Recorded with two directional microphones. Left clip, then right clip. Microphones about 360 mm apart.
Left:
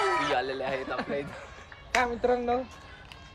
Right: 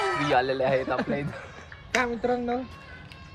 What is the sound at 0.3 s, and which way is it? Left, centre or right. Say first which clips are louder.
Speech: right 7 dB; centre.